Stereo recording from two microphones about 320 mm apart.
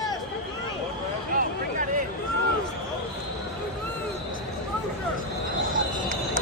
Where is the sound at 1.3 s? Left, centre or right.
Right.